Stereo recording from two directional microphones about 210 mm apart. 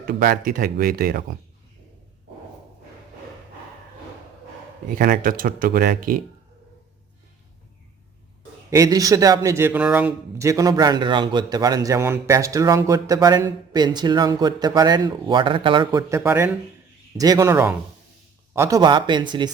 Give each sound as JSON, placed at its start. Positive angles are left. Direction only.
{"t": 0.0, "sound": "speech", "side_deg": -45}
{"t": 4.9, "sound": "speech", "side_deg": -45}
{"t": 8.7, "sound": "speech", "side_deg": -15}